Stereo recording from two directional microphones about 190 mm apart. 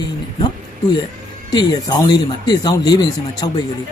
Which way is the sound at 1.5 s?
20° left (ahead or behind).